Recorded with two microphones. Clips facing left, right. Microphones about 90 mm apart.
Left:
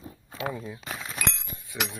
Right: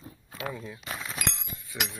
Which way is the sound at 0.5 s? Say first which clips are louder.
Left 3 dB; 15° left (ahead or behind).